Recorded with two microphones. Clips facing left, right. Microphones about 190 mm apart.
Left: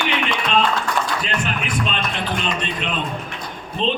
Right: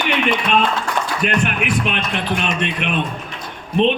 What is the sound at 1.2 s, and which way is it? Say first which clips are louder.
Music: right 5 dB; 60° right (ahead or behind).